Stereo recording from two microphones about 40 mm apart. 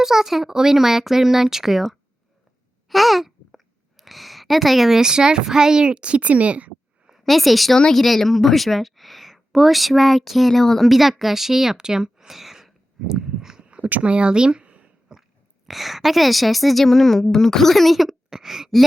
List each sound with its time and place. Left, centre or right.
0.0 s a child's voice: centre; by 6.7 s right
7.3 s a woman's voice: centre
10.5 s speech: centre
10.8 s speech: centre
13.1 s a sound: centre
13.6 s a sound: right
15.1 s biting: centre
15.6 s a woman's voice: centre